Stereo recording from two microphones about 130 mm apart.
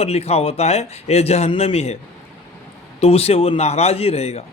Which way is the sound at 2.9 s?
50° left (ahead or behind).